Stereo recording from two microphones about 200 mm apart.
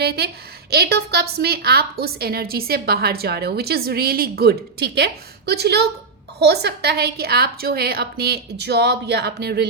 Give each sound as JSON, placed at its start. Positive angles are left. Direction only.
{"t": 0.7, "sound": "a woman's voice", "side_deg": -55}